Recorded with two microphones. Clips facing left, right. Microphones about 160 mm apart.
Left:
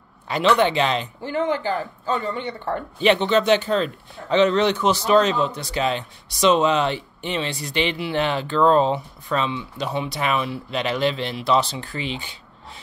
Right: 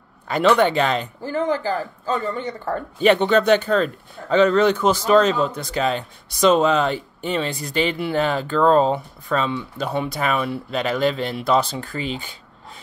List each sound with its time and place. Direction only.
0.3 s speech: 50° right (ahead or behind)